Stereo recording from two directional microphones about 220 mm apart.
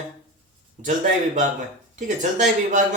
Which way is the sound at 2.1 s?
35° right (ahead or behind).